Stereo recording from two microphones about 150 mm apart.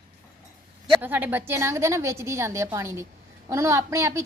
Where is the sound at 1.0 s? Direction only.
15° right (ahead or behind).